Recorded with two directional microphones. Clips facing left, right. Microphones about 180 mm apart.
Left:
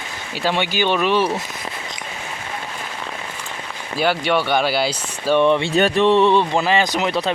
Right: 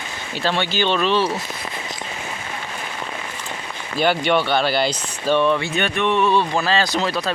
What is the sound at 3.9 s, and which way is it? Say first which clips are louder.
Speech: right 1 dB; 5° left (ahead or behind).